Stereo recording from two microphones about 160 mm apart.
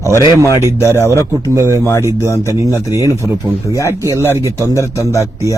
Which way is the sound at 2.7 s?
20° left (ahead or behind).